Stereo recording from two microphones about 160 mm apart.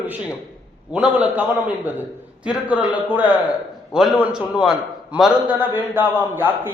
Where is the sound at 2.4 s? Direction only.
10° right (ahead or behind).